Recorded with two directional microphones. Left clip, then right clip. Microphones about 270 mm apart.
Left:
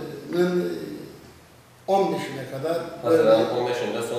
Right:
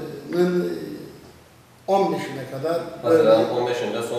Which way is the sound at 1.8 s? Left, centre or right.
Centre.